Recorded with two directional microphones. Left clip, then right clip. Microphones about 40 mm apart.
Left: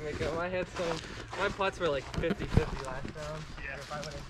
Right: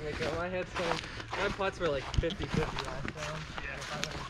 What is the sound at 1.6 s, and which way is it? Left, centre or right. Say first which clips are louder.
Speech: left 1 dB; left.